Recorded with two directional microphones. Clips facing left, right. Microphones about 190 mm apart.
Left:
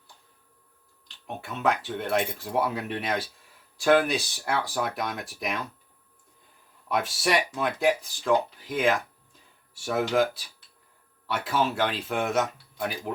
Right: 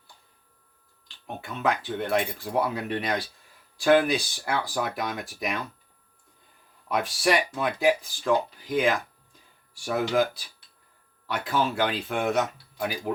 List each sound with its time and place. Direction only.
1.4 s speech: centre (ahead or behind)
6.8 s speech: centre (ahead or behind)